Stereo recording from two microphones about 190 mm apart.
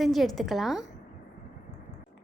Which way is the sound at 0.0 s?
Centre (ahead or behind).